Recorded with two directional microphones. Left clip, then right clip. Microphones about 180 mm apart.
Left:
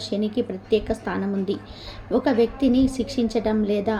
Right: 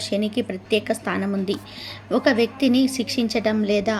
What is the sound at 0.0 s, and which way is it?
A woman's voice, 15° right (ahead or behind).